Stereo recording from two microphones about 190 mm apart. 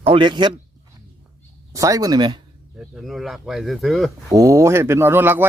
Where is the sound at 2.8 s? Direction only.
Centre (ahead or behind).